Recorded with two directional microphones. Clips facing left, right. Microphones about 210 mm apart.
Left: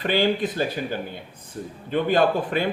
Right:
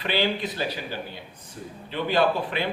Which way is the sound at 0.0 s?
45° left (ahead or behind).